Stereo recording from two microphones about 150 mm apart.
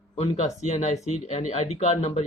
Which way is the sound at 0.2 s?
45° left (ahead or behind).